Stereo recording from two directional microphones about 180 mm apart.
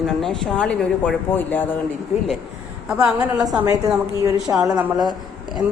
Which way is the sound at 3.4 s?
20° right (ahead or behind).